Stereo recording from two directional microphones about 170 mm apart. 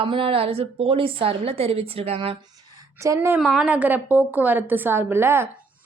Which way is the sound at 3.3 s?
5° right (ahead or behind).